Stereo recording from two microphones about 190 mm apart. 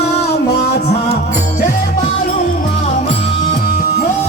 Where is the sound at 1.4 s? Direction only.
45° left (ahead or behind).